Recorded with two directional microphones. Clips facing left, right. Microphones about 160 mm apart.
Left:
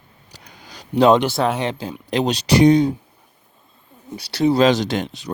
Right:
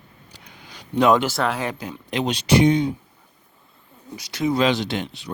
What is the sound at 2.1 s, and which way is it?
Speech, 35° left (ahead or behind).